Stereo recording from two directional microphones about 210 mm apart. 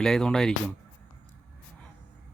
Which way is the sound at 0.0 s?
5° left (ahead or behind).